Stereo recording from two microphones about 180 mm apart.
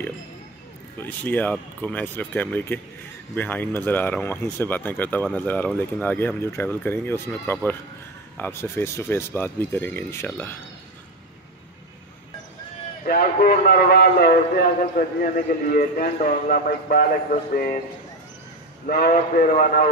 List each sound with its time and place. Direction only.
0.9 s speech: 10° left (ahead or behind)
13.0 s a man's voice: 50° left (ahead or behind)
18.9 s a man's voice: 50° left (ahead or behind)